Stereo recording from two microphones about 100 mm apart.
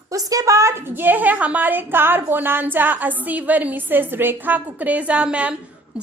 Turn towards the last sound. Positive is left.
turn(degrees=-10)  # may be behind; listen again after turning